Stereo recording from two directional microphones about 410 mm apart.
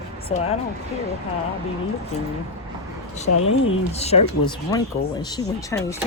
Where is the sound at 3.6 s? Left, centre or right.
Left.